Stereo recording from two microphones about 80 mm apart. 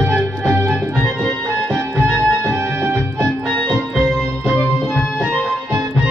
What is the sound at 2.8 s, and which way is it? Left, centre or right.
Music, right.